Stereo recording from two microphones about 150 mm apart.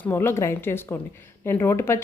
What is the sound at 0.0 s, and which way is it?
Speech, 15° left (ahead or behind).